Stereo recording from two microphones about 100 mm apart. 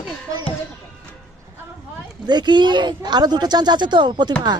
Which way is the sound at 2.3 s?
45° right (ahead or behind).